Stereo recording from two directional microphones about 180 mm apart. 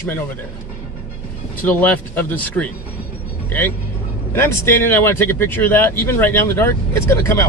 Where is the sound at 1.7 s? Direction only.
10° left (ahead or behind).